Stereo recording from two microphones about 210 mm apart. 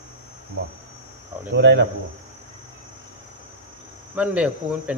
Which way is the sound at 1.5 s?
60° right (ahead or behind).